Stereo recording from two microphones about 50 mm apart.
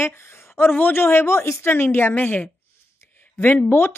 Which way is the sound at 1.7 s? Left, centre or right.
Left.